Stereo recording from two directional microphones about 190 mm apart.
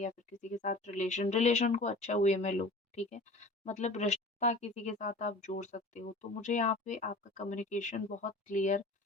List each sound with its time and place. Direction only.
0.0 s speech: 40° left (ahead or behind)